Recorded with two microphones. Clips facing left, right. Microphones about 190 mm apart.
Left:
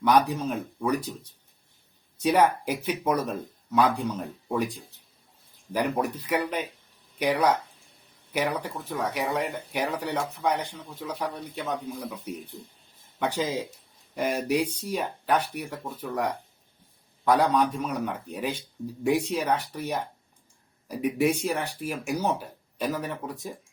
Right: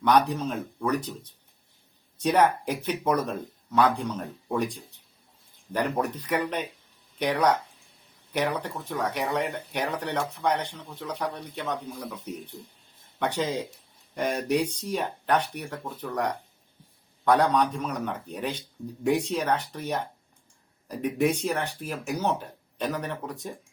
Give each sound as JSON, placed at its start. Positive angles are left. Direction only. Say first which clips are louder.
{"t": 0.0, "sound": "speech", "louder": "even", "side_deg": 10}